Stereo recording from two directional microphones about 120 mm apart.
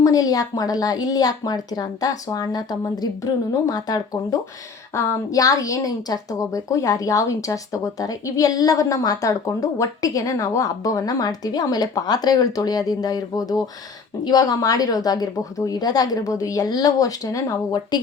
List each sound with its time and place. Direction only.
0.0 s a woman's voice: 30° left (ahead or behind)